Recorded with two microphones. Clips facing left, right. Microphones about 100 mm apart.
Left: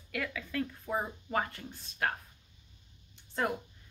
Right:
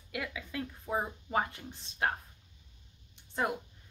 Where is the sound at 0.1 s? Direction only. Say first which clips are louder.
Left 2 dB; 15° right (ahead or behind).